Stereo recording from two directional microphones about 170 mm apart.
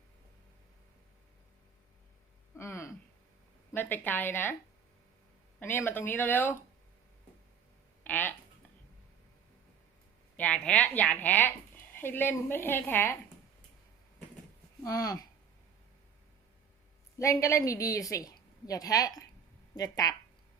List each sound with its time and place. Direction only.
2.6 s a sound: 15° left (ahead or behind)
3.7 s a woman's voice: 10° left (ahead or behind)
5.5 s a woman's voice: 10° left (ahead or behind)
8.0 s speech: 10° left (ahead or behind)
10.3 s a woman's voice: 5° left (ahead or behind)
14.8 s a woman's voice: 20° left (ahead or behind)
17.2 s a woman's voice: 20° left (ahead or behind)